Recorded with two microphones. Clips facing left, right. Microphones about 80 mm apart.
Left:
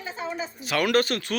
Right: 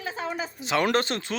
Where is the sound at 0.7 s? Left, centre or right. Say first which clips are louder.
Left 1 dB; right.